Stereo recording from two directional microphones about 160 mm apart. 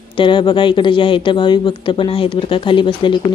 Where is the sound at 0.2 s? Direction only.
30° left (ahead or behind).